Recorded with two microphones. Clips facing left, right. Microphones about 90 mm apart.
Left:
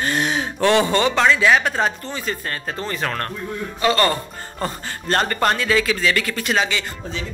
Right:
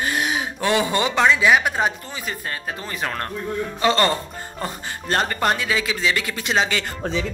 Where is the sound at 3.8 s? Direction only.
25° right (ahead or behind).